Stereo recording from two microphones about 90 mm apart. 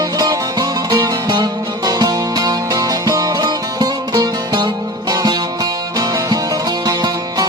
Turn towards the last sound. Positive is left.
turn(degrees=-45)  # may be behind; listen again after turning